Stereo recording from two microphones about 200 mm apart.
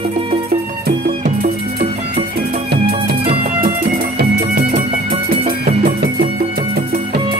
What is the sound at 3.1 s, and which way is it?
Music, 50° right (ahead or behind).